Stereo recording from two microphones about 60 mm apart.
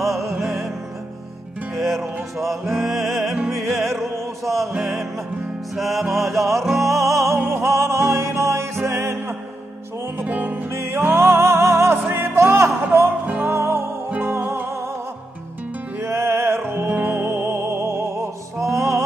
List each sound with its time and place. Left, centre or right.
0.0 s music: centre
1.8 s music: centre
3.5 s music: right
4.0 s music: centre
5.8 s music: centre
7.0 s music: right
10.2 s music: right
10.7 s music: right
16.0 s music: right